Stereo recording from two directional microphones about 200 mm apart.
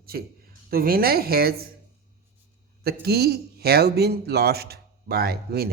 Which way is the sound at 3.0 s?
50° right (ahead or behind).